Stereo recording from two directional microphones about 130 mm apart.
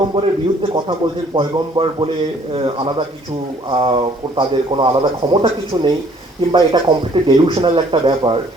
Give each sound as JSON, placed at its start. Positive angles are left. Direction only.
{"t": 0.0, "sound": "speech", "side_deg": -40}
{"t": 1.4, "sound": "speech", "side_deg": -35}